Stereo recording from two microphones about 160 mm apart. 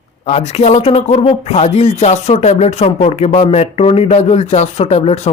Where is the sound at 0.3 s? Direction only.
40° left (ahead or behind).